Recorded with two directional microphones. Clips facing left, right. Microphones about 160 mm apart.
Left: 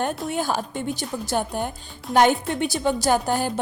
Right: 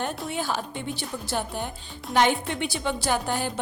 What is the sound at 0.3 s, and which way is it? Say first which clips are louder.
A woman's voice: left 4 dB; 45° left (ahead or behind).